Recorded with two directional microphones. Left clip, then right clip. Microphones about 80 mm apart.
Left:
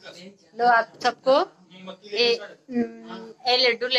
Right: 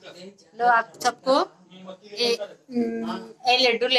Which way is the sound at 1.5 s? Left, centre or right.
Left.